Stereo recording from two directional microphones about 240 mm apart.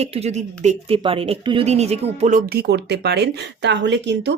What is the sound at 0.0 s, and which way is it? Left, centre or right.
Speech, right.